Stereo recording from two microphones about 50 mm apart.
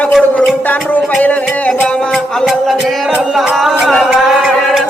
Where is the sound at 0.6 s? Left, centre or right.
Left.